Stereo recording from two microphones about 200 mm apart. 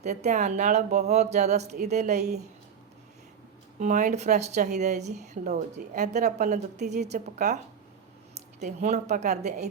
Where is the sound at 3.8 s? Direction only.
40° right (ahead or behind).